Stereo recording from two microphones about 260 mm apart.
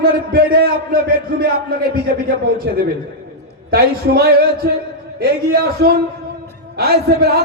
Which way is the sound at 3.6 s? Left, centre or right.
Right.